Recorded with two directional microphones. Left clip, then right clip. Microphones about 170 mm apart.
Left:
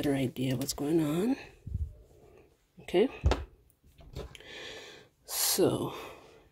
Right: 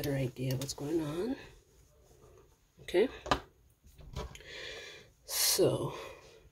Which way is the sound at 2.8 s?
25° left (ahead or behind).